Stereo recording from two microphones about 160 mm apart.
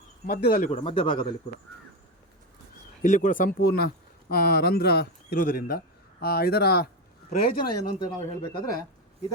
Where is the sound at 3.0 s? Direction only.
55° left (ahead or behind); by 6.8 s 90° left.